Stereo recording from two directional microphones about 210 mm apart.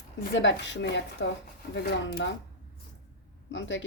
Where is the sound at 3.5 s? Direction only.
65° left (ahead or behind).